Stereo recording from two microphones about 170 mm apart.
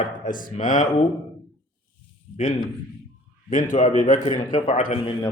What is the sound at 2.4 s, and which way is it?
Speech, 30° left (ahead or behind).